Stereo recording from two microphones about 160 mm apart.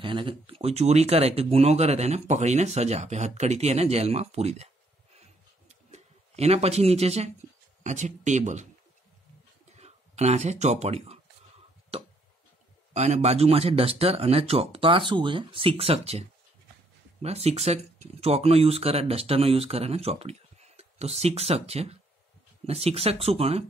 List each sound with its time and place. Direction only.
0.0 s speech: 30° right (ahead or behind)
5.2 s a sound: 45° right (ahead or behind)
7.8 s speech: 50° right (ahead or behind)
9.7 s speech: 45° right (ahead or behind)
12.9 s speech: 45° right (ahead or behind)